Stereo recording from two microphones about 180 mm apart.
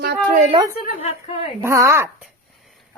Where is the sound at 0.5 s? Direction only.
30° right (ahead or behind).